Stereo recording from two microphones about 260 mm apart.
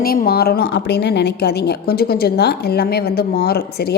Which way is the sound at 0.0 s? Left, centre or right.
Left.